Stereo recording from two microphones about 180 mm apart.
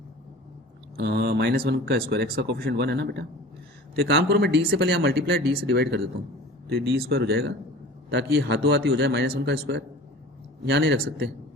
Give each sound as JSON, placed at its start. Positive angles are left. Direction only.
{"t": 0.9, "sound": "speech", "side_deg": -65}
{"t": 8.1, "sound": "speech", "side_deg": -75}